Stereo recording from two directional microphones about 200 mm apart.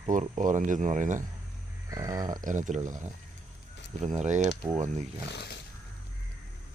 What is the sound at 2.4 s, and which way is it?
Speech, 40° right (ahead or behind).